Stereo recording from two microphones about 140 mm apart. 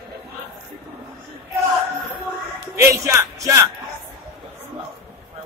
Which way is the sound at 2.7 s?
20° right (ahead or behind).